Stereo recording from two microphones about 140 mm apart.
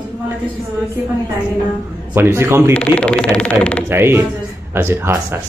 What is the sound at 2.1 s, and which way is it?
Speech, 15° right (ahead or behind).